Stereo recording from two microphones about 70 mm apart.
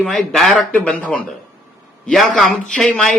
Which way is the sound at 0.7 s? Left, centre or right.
Centre.